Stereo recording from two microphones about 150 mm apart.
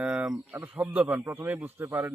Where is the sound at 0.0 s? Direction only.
5° right (ahead or behind).